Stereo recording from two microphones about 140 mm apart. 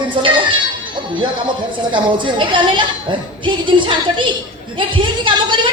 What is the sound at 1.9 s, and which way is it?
Speech, 35° right (ahead or behind).